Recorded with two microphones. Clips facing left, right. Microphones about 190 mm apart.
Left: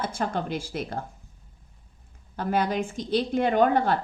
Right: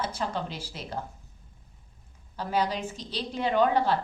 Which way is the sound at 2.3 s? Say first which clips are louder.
Left 3 dB; 55° left (ahead or behind).